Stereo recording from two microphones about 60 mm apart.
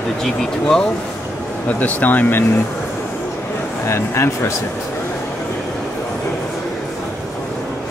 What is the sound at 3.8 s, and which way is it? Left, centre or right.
Speech, left.